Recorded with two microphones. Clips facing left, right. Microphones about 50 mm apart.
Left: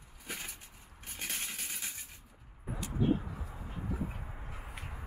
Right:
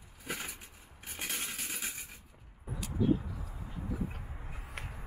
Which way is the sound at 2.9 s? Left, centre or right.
Left.